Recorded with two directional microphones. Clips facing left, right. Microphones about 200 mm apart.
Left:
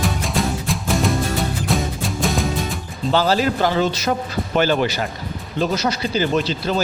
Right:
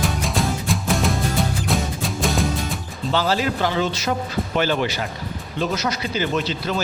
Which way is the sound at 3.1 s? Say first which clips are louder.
Left 3 dB; 40° left (ahead or behind).